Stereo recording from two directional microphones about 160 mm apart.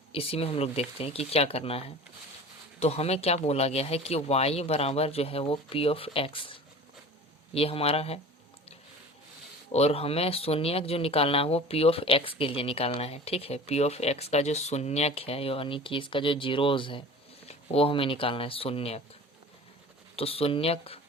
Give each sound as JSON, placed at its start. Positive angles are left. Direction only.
{"t": 0.1, "sound": "speech", "side_deg": 35}
{"t": 9.7, "sound": "speech", "side_deg": 40}
{"t": 20.1, "sound": "speech", "side_deg": 35}